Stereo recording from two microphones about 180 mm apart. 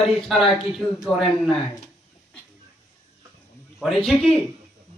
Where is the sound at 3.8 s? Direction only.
Centre (ahead or behind).